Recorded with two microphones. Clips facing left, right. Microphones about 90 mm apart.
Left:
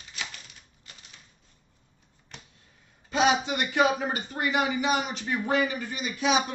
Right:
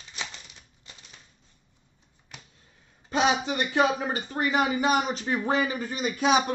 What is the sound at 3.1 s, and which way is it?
Speech, 35° right (ahead or behind).